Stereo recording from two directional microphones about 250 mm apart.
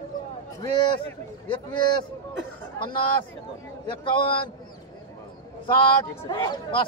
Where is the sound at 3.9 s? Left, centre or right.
Centre.